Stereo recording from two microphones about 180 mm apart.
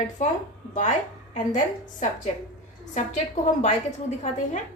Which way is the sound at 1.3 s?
45° left (ahead or behind).